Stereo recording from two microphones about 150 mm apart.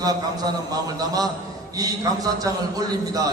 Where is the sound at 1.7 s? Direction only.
25° right (ahead or behind).